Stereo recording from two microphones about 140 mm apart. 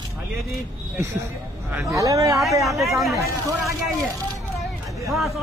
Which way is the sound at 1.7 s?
20° right (ahead or behind).